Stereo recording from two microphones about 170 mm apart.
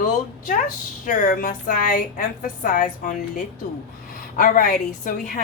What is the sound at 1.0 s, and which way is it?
A woman's voice, 50° left (ahead or behind).